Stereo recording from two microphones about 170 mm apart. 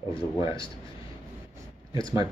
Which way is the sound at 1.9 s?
20° right (ahead or behind).